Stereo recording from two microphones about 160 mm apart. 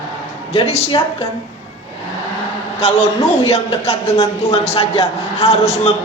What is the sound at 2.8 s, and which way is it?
A man's voice, 40° left (ahead or behind).